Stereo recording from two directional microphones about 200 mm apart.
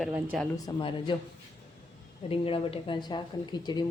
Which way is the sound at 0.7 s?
25° left (ahead or behind).